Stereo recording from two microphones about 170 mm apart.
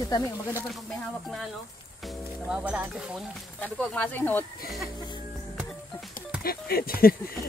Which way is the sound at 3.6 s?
10° left (ahead or behind).